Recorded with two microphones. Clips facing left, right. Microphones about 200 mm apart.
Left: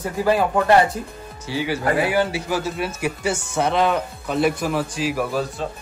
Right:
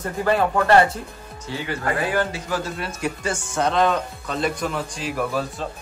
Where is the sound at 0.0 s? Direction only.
10° left (ahead or behind).